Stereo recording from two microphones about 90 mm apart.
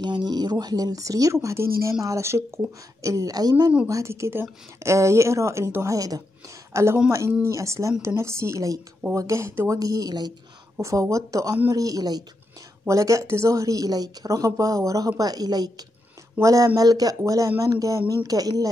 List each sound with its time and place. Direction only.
0.0 s speech: 55° right (ahead or behind)
3.8 s a woman's voice: 35° right (ahead or behind); by 10.3 s 50° right (ahead or behind)
10.8 s speech: 35° right (ahead or behind)
16.3 s speech: 35° right (ahead or behind)